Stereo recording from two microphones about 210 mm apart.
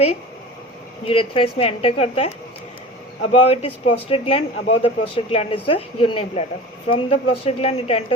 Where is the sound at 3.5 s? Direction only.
25° left (ahead or behind).